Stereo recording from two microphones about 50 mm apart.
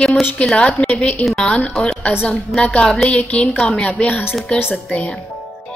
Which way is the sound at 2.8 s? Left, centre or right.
Centre.